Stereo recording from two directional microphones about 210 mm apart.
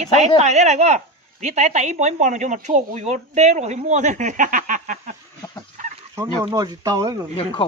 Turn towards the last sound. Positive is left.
turn(degrees=25)  # may be behind; listen again after turning